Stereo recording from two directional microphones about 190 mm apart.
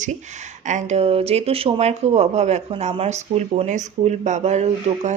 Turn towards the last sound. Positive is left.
turn(degrees=-35)  # may be behind; listen again after turning